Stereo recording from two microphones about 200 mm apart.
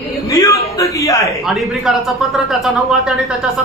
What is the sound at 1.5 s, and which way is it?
Speech, centre (ahead or behind).